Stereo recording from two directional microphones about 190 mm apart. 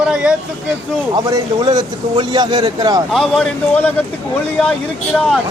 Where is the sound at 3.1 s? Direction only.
5° left (ahead or behind).